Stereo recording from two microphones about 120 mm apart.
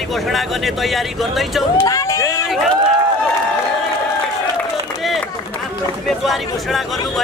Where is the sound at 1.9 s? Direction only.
30° left (ahead or behind).